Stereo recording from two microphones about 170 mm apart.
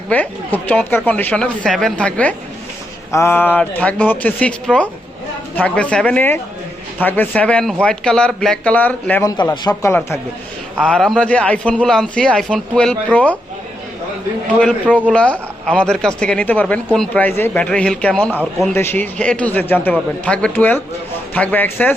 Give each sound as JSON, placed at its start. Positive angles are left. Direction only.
{"t": 0.1, "sound": "speech", "side_deg": 10}
{"t": 10.8, "sound": "a man's voice", "side_deg": 5}
{"t": 14.6, "sound": "speech", "side_deg": 10}